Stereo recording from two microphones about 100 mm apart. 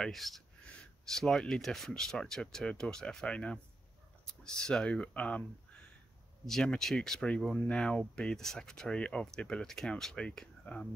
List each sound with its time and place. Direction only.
0.0 s speech: centre (ahead or behind)